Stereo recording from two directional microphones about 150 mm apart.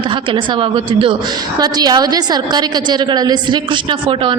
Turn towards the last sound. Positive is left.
turn(degrees=-35)  # may be behind; listen again after turning